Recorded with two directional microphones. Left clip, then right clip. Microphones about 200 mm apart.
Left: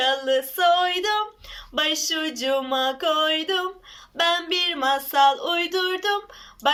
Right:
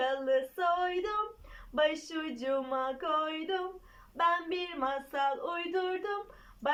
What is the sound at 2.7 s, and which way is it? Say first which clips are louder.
Speech: left 10 dB; 15° left (ahead or behind).